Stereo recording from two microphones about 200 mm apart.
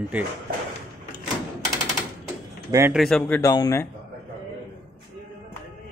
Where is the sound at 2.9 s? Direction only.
Centre (ahead or behind).